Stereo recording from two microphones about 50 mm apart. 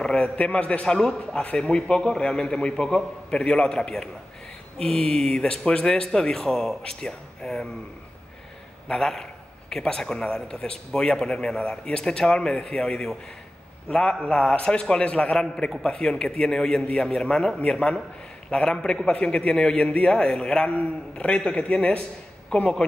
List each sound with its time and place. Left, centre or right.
0.0 s a man's voice: centre
8.8 s a man's voice: centre